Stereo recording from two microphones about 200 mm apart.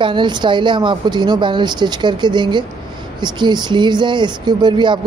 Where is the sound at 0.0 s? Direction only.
25° right (ahead or behind).